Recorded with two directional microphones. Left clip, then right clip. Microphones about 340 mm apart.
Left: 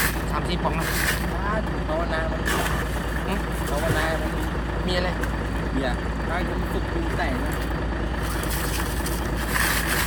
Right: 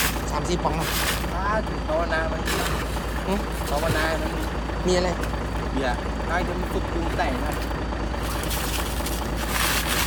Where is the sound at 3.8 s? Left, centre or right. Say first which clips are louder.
Right 1 dB; centre.